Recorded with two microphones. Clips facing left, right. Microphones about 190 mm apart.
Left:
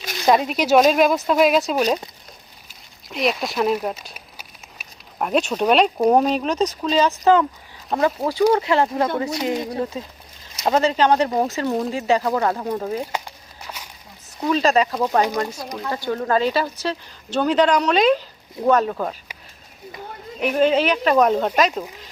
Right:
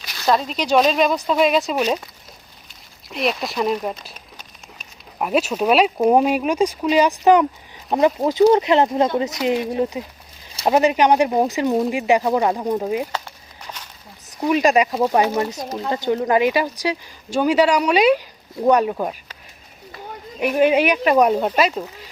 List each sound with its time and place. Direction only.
0.3 s speech: 10° left (ahead or behind)
3.1 s a sound: centre (ahead or behind)
5.2 s speech: 5° right (ahead or behind)
14.4 s speech: 15° right (ahead or behind)
20.4 s speech: 10° right (ahead or behind)